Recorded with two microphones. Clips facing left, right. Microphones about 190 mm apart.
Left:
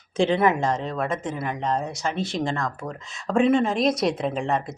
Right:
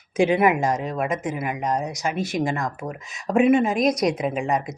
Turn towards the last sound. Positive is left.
turn(degrees=-15)  # may be behind; listen again after turning